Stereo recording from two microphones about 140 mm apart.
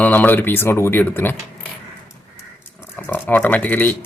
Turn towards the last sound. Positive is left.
turn(degrees=10)  # may be behind; listen again after turning